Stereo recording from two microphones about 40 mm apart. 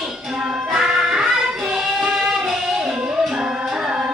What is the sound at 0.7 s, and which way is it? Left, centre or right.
Music, centre.